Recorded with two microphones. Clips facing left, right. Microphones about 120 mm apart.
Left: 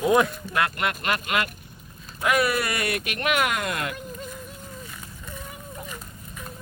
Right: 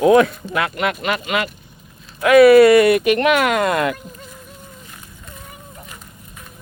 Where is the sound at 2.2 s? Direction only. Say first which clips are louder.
Right 15 dB; 90° right.